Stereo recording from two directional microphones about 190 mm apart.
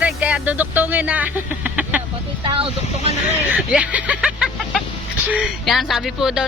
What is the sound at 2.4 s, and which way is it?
Speech, 30° right (ahead or behind).